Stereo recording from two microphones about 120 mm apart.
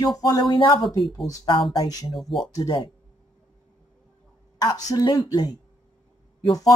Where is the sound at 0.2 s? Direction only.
35° left (ahead or behind).